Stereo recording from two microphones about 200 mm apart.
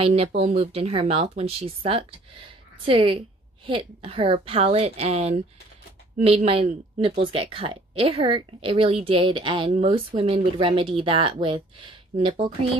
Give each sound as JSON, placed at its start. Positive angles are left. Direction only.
{"t": 0.0, "sound": "speech", "side_deg": -30}